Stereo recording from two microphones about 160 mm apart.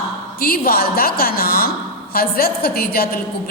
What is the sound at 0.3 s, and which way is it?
A woman's voice, 70° left (ahead or behind).